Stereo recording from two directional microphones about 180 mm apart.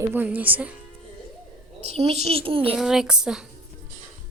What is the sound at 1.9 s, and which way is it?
Speech, 35° right (ahead or behind).